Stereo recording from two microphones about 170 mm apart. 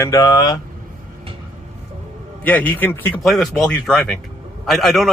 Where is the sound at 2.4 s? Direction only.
10° left (ahead or behind).